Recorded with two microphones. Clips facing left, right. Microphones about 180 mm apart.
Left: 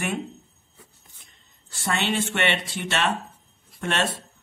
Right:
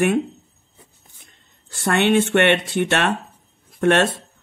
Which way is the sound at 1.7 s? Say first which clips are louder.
Right 8 dB; 60° right (ahead or behind).